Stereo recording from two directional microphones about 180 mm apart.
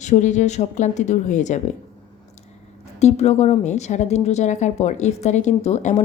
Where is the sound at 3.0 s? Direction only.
40° left (ahead or behind).